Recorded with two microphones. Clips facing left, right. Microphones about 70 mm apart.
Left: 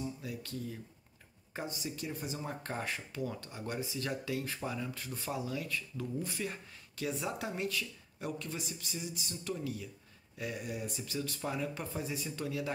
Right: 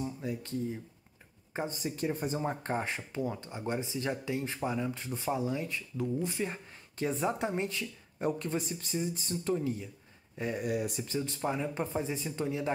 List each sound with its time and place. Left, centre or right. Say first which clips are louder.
0.0 s speech: right 4 dB; right
1.8 s speech: right 7 dB; right
10.6 s speech: right 7 dB; right
11.1 s speech: right 5 dB; right